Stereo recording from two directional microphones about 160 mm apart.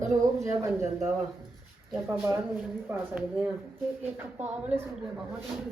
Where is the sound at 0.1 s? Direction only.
15° right (ahead or behind).